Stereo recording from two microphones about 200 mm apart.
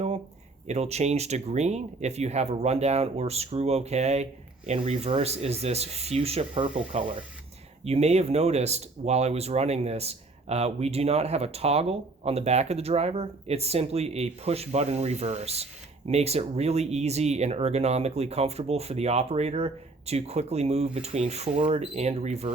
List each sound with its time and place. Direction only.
0.7 s speech: 35° right (ahead or behind)